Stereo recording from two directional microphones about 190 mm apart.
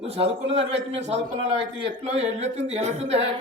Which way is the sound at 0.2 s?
30° right (ahead or behind).